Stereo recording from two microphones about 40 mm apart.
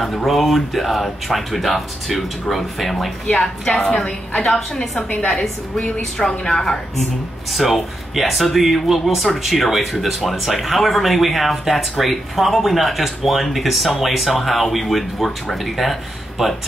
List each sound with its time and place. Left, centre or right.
0.0 s speech: centre
3.3 s a woman's voice: centre
5.8 s a woman's voice: left
6.5 s a woman's voice: centre
7.5 s speech: centre